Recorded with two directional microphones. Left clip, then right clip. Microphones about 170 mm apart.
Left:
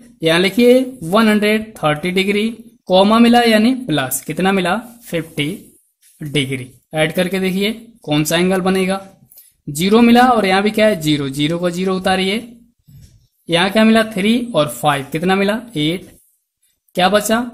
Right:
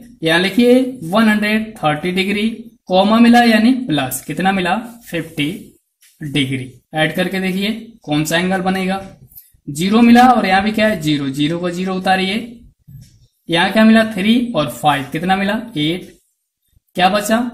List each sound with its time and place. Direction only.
0.2 s speech: 50° left (ahead or behind)
13.5 s speech: 50° left (ahead or behind)